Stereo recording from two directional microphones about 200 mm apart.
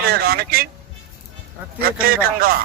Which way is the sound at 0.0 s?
50° right (ahead or behind).